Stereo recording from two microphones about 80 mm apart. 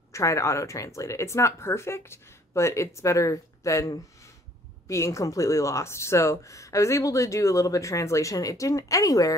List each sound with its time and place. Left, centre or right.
0.1 s speech: left